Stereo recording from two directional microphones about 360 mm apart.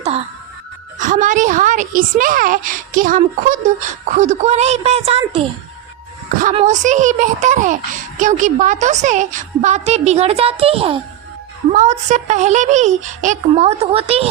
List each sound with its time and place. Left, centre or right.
0.9 s a woman's voice: right